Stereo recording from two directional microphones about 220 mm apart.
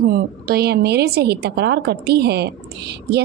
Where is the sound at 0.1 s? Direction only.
45° right (ahead or behind).